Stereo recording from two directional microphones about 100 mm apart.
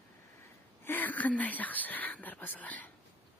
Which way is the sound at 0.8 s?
20° left (ahead or behind).